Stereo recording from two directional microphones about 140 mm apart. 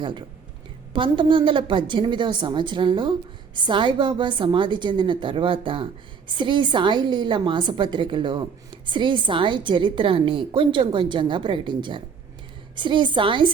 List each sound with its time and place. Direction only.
0.0 s a woman's voice: 35° right (ahead or behind)